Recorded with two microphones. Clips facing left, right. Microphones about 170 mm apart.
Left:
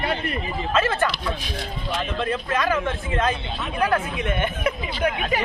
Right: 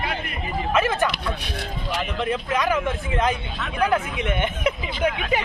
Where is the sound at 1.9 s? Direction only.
15° right (ahead or behind).